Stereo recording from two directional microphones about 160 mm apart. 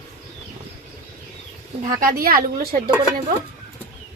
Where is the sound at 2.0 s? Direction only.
65° right (ahead or behind).